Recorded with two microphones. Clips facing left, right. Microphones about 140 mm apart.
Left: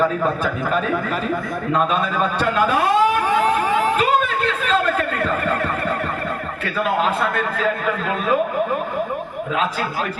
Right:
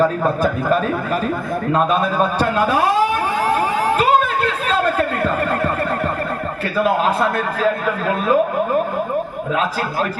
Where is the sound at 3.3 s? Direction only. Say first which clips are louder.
Left 1 dB; 40° right (ahead or behind).